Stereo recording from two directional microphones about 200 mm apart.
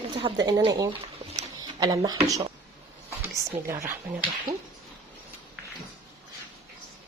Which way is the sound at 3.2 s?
15° right (ahead or behind).